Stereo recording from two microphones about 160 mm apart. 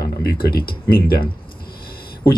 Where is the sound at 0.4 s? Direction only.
70° left (ahead or behind).